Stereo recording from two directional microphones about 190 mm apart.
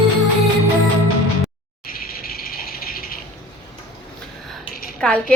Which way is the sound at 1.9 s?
50° left (ahead or behind).